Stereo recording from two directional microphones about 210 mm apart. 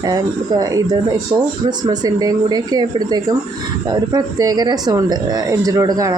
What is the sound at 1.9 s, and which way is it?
Speech, 20° right (ahead or behind).